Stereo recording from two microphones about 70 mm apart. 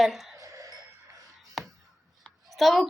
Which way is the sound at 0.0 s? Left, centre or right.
Centre.